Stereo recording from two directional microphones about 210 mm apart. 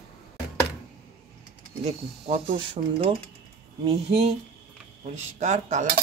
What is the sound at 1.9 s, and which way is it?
Speech, 30° right (ahead or behind).